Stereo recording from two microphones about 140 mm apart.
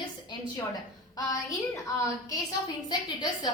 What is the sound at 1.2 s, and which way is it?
A woman's voice, 25° left (ahead or behind).